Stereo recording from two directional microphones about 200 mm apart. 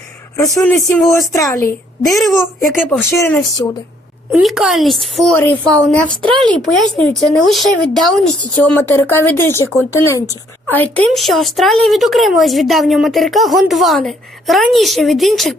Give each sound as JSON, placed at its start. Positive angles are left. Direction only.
{"t": 0.3, "sound": "a child's voice", "side_deg": 10}
{"t": 2.0, "sound": "speech", "side_deg": 0}
{"t": 2.4, "sound": "a child's voice", "side_deg": 10}
{"t": 4.3, "sound": "a child's voice", "side_deg": 0}